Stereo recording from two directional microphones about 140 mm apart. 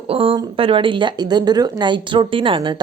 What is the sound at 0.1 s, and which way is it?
A woman's voice, 40° right (ahead or behind).